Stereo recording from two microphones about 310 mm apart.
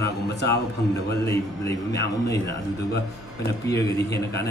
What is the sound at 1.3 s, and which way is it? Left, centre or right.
A man's voice, centre.